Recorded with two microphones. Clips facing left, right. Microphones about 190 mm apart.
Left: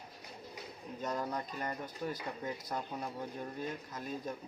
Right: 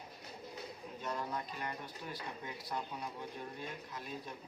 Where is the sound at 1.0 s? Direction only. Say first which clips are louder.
Left 3 dB; 40° left (ahead or behind).